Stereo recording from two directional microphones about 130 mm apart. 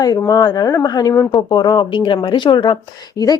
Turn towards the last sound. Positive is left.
turn(degrees=30)  # may be behind; listen again after turning